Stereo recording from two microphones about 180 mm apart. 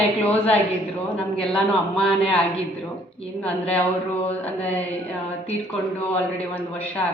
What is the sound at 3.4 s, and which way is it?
Speech, 5° left (ahead or behind).